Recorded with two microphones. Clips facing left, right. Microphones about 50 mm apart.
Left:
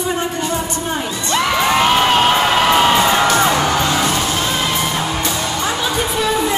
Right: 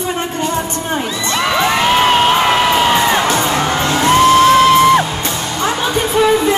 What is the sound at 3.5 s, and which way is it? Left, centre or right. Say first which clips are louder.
Music: right 1 dB; right.